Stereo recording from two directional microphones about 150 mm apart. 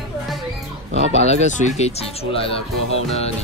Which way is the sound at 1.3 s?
45° left (ahead or behind).